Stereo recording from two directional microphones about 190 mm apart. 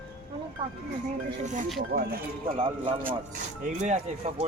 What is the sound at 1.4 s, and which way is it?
Speech, 40° right (ahead or behind).